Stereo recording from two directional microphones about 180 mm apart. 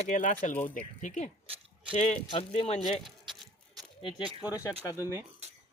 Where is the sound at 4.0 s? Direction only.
25° left (ahead or behind).